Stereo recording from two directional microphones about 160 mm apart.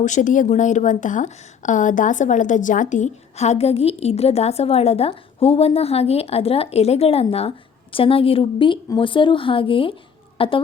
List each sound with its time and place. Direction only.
0.0 s a woman's voice: 50° left (ahead or behind); by 10.6 s 35° left (ahead or behind)